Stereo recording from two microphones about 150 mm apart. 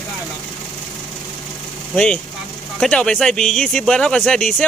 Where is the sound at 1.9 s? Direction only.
5° left (ahead or behind).